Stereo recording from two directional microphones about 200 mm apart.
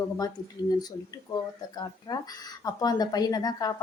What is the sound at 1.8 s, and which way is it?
A woman's voice, 20° left (ahead or behind).